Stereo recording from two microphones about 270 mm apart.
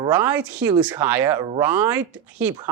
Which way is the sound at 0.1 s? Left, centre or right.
Centre.